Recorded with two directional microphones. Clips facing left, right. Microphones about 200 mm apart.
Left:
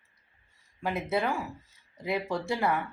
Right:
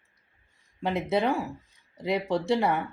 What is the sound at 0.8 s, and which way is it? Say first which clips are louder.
Speech: right 4 dB; 20° right (ahead or behind).